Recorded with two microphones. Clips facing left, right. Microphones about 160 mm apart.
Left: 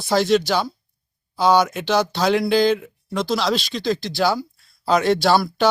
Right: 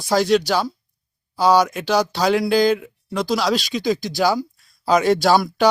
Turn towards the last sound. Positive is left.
turn(degrees=-10)  # may be behind; listen again after turning